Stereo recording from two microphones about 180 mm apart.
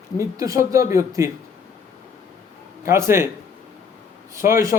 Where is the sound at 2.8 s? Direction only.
15° right (ahead or behind).